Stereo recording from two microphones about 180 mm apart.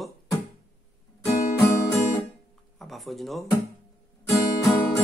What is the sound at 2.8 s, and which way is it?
Speech, centre (ahead or behind).